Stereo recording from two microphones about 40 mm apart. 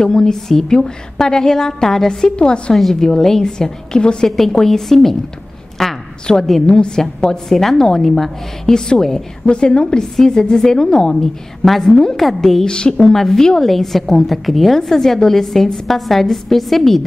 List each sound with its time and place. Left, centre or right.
0.0 s a woman's voice: centre
2.3 s a woman's voice: left
2.7 s a woman's voice: centre
4.5 s a woman's voice: centre
5.8 s a sound: centre
6.2 s a woman's voice: centre
7.4 s a woman's voice: centre
9.5 s a woman's voice: left; by 12.6 s centre
12.6 s a woman's voice: left
12.9 s a woman's voice: centre